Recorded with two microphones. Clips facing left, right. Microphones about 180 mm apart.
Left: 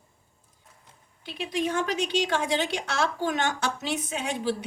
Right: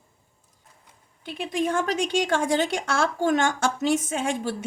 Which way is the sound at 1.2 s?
50° right (ahead or behind).